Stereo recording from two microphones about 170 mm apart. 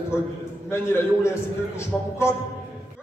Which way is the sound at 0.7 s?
15° left (ahead or behind).